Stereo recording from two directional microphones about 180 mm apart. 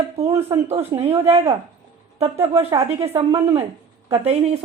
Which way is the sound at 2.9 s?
35° right (ahead or behind).